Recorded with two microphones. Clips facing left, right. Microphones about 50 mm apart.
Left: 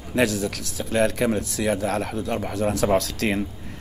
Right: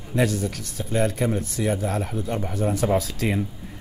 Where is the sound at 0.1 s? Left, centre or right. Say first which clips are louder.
Left 1 dB; left.